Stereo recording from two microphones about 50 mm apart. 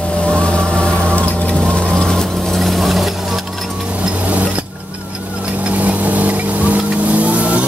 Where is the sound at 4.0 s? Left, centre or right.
Right.